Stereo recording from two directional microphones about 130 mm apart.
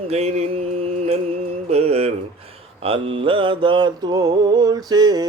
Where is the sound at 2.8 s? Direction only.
45° right (ahead or behind).